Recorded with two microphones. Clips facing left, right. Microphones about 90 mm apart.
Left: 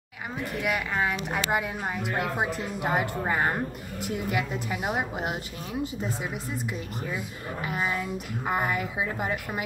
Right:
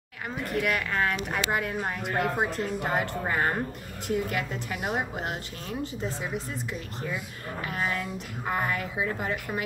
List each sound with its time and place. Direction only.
0.5 s a woman's voice: 5° left (ahead or behind)
7.6 s a woman's voice: 15° left (ahead or behind)